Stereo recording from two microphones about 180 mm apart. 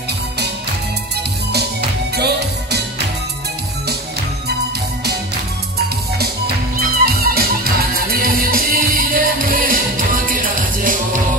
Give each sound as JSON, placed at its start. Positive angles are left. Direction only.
{"t": 1.5, "sound": "music", "side_deg": -65}
{"t": 6.8, "sound": "music", "side_deg": -60}